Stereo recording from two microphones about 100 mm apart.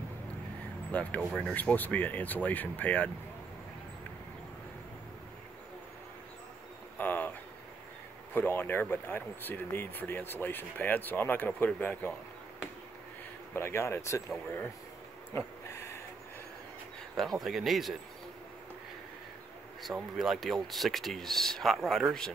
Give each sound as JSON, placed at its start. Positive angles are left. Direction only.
{"t": 0.9, "sound": "speech", "side_deg": 10}
{"t": 7.0, "sound": "a sound", "side_deg": 15}
{"t": 8.3, "sound": "speech", "side_deg": 20}
{"t": 13.5, "sound": "speech", "side_deg": 25}
{"t": 15.3, "sound": "a sound", "side_deg": 25}
{"t": 17.2, "sound": "speech", "side_deg": 0}
{"t": 19.8, "sound": "speech", "side_deg": -5}